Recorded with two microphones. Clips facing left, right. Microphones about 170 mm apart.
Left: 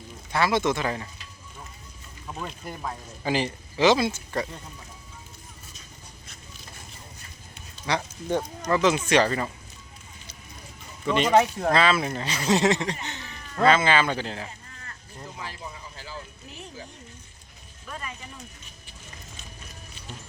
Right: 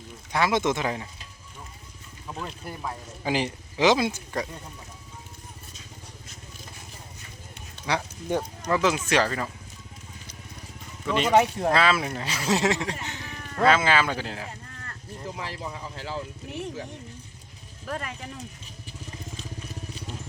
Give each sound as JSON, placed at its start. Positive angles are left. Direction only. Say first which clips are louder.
{"t": 0.3, "sound": "speech", "louder": "even", "side_deg": -15}
{"t": 2.2, "sound": "speech", "louder": "even", "side_deg": -5}
{"t": 7.9, "sound": "speech", "louder": "even", "side_deg": -10}
{"t": 11.0, "sound": "speech", "louder": "left 1 dB", "side_deg": 0}
{"t": 15.4, "sound": "speech", "louder": "right 2 dB", "side_deg": -80}
{"t": 17.8, "sound": "speech", "louder": "right 5 dB", "side_deg": -65}